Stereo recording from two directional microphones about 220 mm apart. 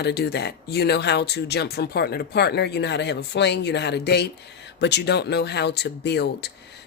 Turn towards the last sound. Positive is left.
turn(degrees=50)  # may be behind; listen again after turning